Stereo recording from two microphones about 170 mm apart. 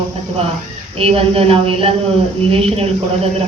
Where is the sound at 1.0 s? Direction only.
35° right (ahead or behind).